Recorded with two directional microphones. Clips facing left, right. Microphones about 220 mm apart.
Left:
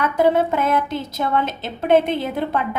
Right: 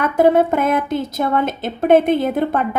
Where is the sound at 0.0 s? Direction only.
50° right (ahead or behind).